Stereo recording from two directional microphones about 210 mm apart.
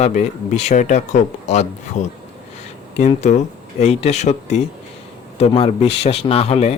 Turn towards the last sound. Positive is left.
turn(degrees=30)  # may be behind; listen again after turning